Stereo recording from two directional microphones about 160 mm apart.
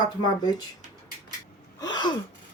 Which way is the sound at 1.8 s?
25° left (ahead or behind).